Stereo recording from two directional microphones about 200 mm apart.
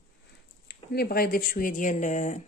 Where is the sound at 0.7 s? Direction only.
50° left (ahead or behind).